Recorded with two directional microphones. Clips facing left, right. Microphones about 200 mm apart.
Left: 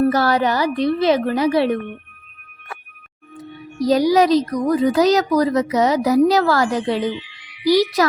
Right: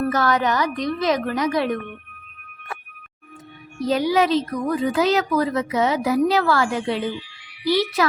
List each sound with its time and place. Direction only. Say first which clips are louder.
0.0 s speech: left 4 dB; 35° left (ahead or behind)
3.8 s speech: left 5 dB; 40° left (ahead or behind)